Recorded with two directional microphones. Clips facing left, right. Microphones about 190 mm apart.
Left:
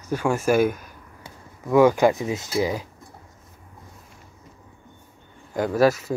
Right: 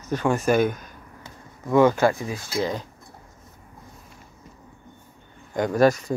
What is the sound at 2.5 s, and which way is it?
Speech, 5° left (ahead or behind).